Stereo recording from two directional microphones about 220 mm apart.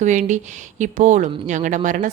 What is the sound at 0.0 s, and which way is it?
A woman's voice, 35° right (ahead or behind).